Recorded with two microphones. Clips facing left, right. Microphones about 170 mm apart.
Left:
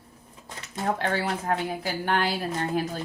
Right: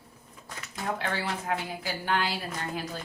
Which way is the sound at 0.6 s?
40° left (ahead or behind).